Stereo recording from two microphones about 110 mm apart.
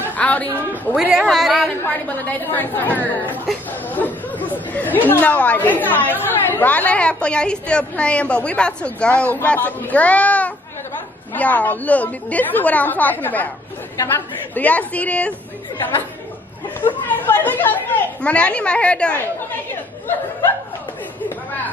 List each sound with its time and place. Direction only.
0.1 s a sound: 15° left (ahead or behind)
1.2 s speech: centre (ahead or behind)
1.9 s a woman's voice: 15° left (ahead or behind)
17.1 s a woman's voice: 15° left (ahead or behind)